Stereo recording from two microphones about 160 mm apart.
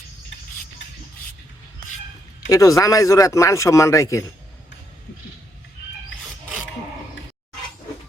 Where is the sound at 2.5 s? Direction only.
20° left (ahead or behind).